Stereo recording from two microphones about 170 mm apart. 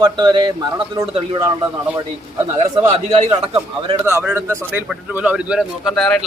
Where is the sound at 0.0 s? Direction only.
25° right (ahead or behind).